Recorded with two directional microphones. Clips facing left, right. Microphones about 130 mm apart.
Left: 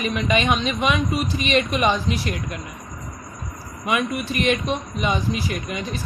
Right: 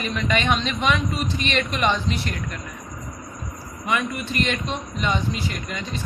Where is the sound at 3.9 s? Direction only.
15° left (ahead or behind).